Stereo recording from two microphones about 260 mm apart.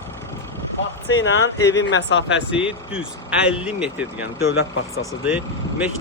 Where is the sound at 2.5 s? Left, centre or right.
Centre.